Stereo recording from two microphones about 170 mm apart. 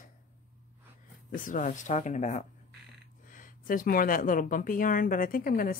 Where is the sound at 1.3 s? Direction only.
50° left (ahead or behind).